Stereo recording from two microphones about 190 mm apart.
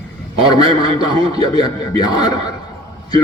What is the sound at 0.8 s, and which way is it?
A man's voice, 20° left (ahead or behind).